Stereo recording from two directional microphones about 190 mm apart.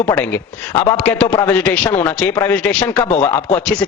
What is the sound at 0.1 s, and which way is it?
A man's voice, 10° left (ahead or behind).